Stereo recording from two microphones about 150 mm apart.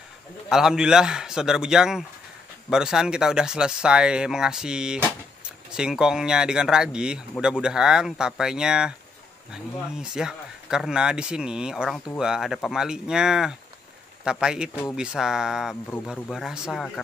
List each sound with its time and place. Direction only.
0.5 s speech: 5° right (ahead or behind)